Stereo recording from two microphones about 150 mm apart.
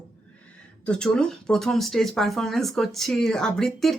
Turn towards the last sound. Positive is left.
turn(degrees=5)  # may be behind; listen again after turning